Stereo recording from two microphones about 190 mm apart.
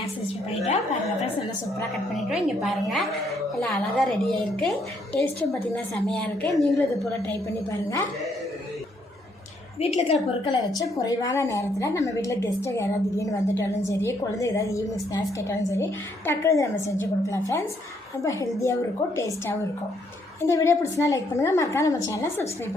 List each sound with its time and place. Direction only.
1.9 s a woman's voice: centre (ahead or behind)
7.3 s a woman's voice: 15° left (ahead or behind)
9.8 s a woman's voice: 30° left (ahead or behind)
10.9 s a woman's voice: 15° left (ahead or behind)